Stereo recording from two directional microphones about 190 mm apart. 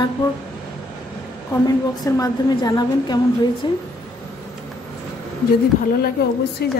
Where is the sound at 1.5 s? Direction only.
15° left (ahead or behind).